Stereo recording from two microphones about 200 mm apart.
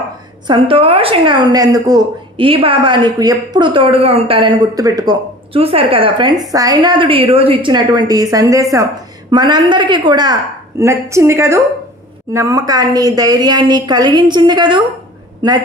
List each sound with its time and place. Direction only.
0.5 s a woman's voice: 25° right (ahead or behind)